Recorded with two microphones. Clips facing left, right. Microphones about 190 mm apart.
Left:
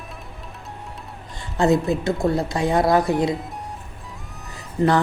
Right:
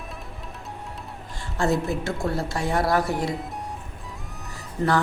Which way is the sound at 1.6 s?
20° left (ahead or behind).